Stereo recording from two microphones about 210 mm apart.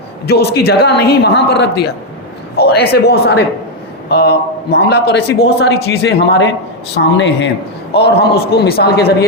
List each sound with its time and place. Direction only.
0.3 s a man's voice: 50° left (ahead or behind)